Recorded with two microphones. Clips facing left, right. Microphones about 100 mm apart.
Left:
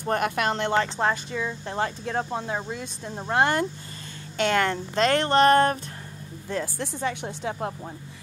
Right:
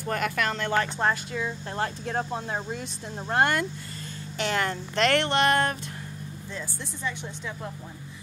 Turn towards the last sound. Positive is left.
turn(degrees=55)  # may be behind; listen again after turning